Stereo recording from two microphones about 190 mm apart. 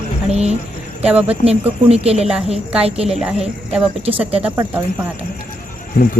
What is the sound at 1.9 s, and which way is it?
A woman's voice, 30° right (ahead or behind).